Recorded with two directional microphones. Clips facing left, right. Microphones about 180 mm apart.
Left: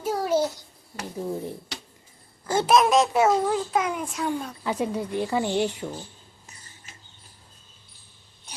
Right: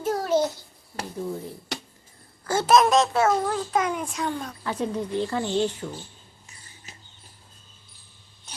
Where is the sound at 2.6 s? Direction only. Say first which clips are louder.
Right 1 dB; 5° left (ahead or behind).